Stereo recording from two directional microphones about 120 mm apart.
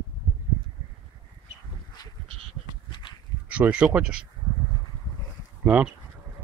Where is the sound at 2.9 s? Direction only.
40° left (ahead or behind).